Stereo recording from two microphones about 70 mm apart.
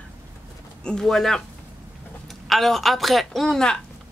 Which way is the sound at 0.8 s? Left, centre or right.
Centre.